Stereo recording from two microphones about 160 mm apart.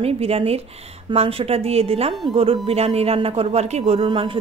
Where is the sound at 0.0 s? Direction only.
40° right (ahead or behind).